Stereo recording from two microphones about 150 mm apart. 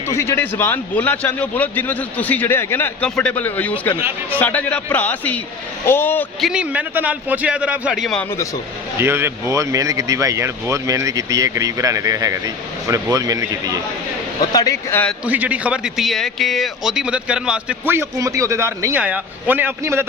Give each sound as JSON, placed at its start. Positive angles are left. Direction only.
{"t": 0.1, "sound": "a man's voice", "side_deg": 15}
{"t": 6.4, "sound": "a man's voice", "side_deg": -5}
{"t": 9.0, "sound": "speech", "side_deg": -15}
{"t": 14.5, "sound": "speech", "side_deg": 25}
{"t": 15.2, "sound": "a man's voice", "side_deg": -10}